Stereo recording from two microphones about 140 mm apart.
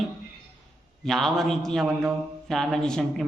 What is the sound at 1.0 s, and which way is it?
Speech, 5° left (ahead or behind).